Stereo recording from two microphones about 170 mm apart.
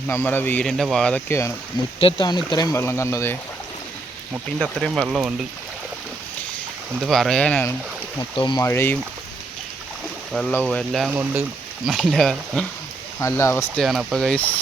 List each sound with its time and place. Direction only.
0.1 s speech: 10° left (ahead or behind)
2.0 s speech: 30° left (ahead or behind)
5.0 s speech: 5° right (ahead or behind)
6.9 s speech: centre (ahead or behind)
8.2 s speech: 25° left (ahead or behind)
8.6 s speech: 15° left (ahead or behind)
10.5 s speech: 10° left (ahead or behind)
11.1 s speech: 10° right (ahead or behind)
11.9 s speech: centre (ahead or behind)
13.1 s speech: 15° left (ahead or behind)
13.7 s speech: centre (ahead or behind)